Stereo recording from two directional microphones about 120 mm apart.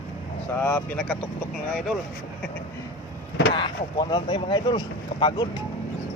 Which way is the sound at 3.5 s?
40° left (ahead or behind).